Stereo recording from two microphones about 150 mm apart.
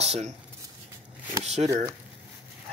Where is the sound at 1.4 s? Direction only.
45° right (ahead or behind).